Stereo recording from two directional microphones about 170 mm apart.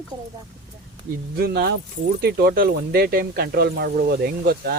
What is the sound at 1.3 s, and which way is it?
Speech, 65° right (ahead or behind).